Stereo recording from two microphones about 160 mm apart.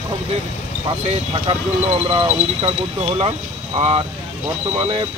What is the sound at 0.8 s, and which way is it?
Speech, 35° right (ahead or behind).